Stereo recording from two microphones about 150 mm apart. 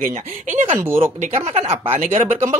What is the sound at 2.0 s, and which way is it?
Speech, 50° right (ahead or behind).